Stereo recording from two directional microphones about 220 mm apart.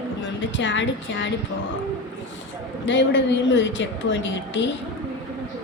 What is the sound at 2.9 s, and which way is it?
A woman's voice, 55° left (ahead or behind).